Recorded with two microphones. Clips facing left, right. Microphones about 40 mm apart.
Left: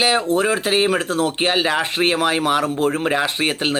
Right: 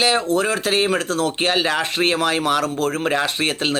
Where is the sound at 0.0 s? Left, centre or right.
Centre.